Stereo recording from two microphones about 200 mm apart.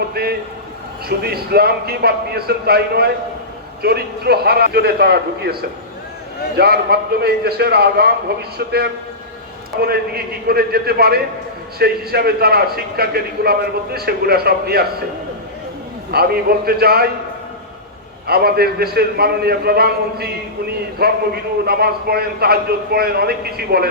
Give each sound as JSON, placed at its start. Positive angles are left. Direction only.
{"t": 0.1, "sound": "a man's voice", "side_deg": -50}
{"t": 6.6, "sound": "a man's voice", "side_deg": -55}
{"t": 16.1, "sound": "a man's voice", "side_deg": -50}
{"t": 18.3, "sound": "a man's voice", "side_deg": -50}